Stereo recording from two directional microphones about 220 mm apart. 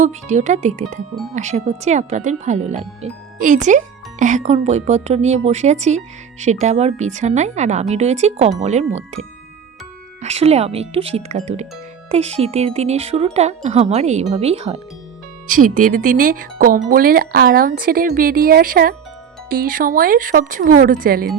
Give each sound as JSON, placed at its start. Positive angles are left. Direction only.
{"t": 0.0, "sound": "speech", "side_deg": -35}
{"t": 10.2, "sound": "speech", "side_deg": -30}
{"t": 15.4, "sound": "speech", "side_deg": -40}